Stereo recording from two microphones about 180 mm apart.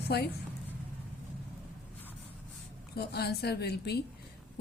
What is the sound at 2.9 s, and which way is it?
A woman's voice, 65° left (ahead or behind).